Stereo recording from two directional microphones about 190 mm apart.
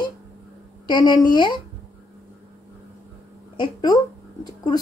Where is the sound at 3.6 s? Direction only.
20° left (ahead or behind).